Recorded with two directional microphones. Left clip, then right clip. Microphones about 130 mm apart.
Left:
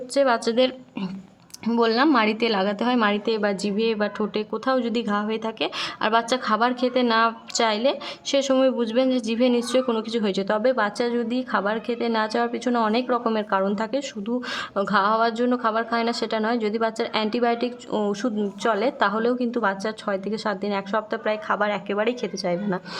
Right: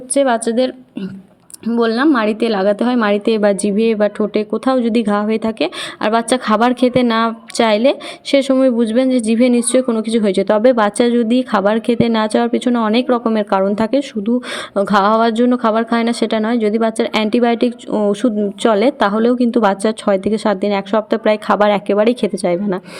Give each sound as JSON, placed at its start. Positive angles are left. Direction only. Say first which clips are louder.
{"t": 0.1, "sound": "a woman's voice", "louder": "right 6 dB", "side_deg": -20}
{"t": 1.8, "sound": "a woman's voice", "louder": "right 5 dB", "side_deg": -15}